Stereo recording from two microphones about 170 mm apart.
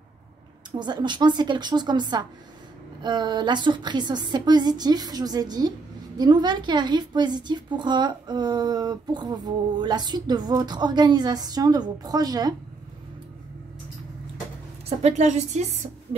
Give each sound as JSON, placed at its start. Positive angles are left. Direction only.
{"t": 0.7, "sound": "a woman's voice", "side_deg": -25}
{"t": 14.9, "sound": "a woman's voice", "side_deg": -40}